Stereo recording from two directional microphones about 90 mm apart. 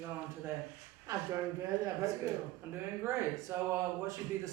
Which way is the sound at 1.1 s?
35° right (ahead or behind).